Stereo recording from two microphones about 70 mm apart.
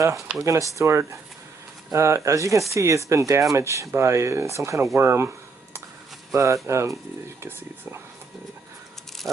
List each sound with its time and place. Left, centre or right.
0.4 s speech: right
4.9 s a sound: right
6.3 s speech: right
7.4 s speech: right